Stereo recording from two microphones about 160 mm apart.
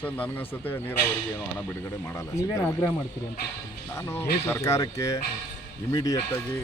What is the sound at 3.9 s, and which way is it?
Speech, 15° left (ahead or behind).